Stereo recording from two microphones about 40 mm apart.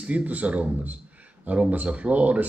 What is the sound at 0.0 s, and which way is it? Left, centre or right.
Speech, right.